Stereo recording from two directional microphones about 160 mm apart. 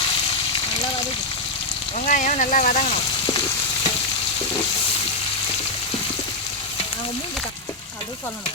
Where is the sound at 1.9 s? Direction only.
50° left (ahead or behind).